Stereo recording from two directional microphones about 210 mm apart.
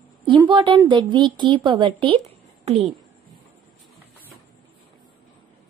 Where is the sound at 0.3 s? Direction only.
25° right (ahead or behind).